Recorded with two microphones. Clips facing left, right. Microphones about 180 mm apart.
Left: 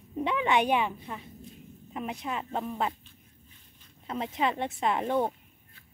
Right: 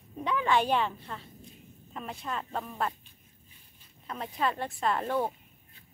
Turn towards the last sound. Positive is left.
turn(degrees=20)  # may be behind; listen again after turning